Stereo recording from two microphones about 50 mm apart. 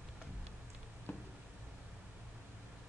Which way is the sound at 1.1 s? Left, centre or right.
Left.